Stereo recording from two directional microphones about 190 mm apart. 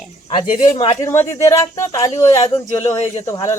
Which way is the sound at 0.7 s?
20° left (ahead or behind).